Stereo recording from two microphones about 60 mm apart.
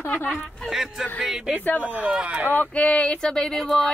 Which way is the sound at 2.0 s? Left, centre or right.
Centre.